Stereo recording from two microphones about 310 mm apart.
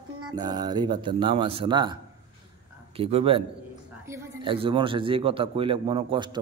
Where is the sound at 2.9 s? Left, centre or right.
Centre.